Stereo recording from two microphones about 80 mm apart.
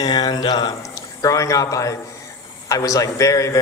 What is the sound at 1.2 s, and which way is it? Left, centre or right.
A man's voice, left.